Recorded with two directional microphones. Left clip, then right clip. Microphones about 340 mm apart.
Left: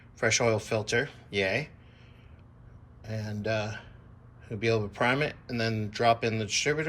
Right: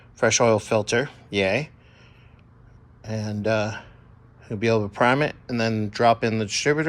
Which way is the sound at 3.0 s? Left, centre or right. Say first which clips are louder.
Right 7 dB; centre.